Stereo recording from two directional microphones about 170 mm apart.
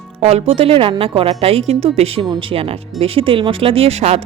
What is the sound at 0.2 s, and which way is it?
Speech, 35° right (ahead or behind).